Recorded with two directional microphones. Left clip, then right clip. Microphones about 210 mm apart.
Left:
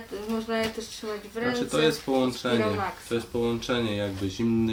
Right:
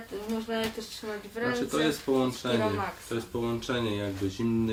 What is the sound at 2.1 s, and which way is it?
Speech, 20° left (ahead or behind).